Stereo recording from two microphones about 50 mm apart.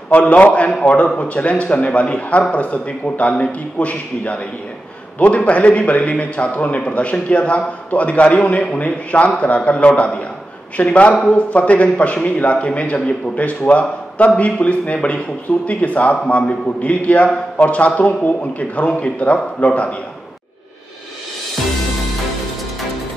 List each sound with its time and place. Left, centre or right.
0.1 s speech: left